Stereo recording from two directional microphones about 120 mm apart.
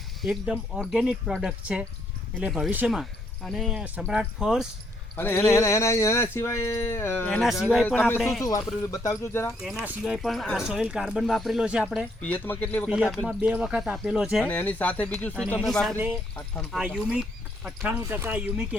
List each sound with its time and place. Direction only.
0.3 s speech: 10° right (ahead or behind)
5.1 s speech: 20° left (ahead or behind)
7.4 s speech: centre (ahead or behind)
7.9 s speech: 15° left (ahead or behind)
8.4 s speech: 25° left (ahead or behind)
10.0 s speech: centre (ahead or behind)
12.2 s speech: 15° left (ahead or behind)
12.9 s speech: 5° right (ahead or behind)
14.4 s speech: 15° left (ahead or behind)
16.7 s speech: 10° right (ahead or behind)